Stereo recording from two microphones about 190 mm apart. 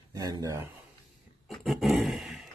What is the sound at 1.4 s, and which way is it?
Dog, centre (ahead or behind).